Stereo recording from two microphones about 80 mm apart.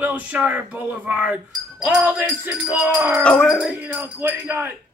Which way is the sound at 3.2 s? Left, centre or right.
Centre.